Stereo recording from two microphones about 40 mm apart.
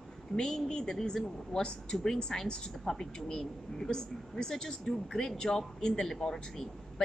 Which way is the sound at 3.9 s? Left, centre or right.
Centre.